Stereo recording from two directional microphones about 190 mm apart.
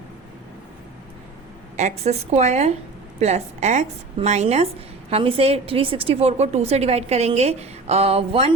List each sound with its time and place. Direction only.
1.7 s a woman's voice: 35° right (ahead or behind)